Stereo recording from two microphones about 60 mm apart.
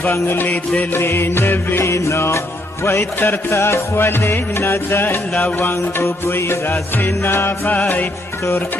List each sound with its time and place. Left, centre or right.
0.3 s music: left
3.2 s music: left